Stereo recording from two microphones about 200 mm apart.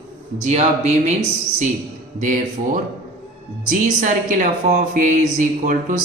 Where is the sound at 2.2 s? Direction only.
40° right (ahead or behind).